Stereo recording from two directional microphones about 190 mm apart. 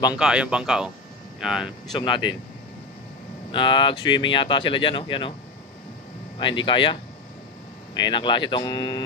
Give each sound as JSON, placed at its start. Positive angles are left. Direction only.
{"t": 0.2, "sound": "speech", "side_deg": -5}
{"t": 2.0, "sound": "speech", "side_deg": 25}
{"t": 3.5, "sound": "speech", "side_deg": 25}
{"t": 6.6, "sound": "speech", "side_deg": 25}